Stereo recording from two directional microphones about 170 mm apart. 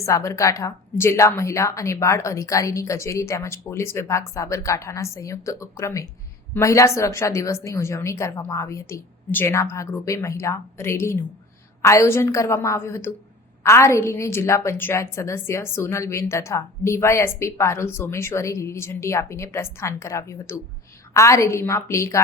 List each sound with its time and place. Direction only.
0.0 s a woman's voice: 15° left (ahead or behind)